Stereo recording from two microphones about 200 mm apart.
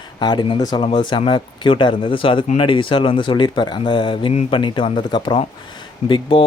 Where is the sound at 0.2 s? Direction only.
20° left (ahead or behind).